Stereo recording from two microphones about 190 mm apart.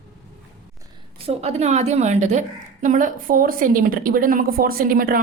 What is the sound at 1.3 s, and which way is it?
A woman's voice, 35° right (ahead or behind).